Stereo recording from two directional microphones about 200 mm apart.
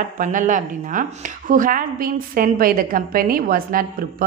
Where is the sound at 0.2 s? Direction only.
40° right (ahead or behind).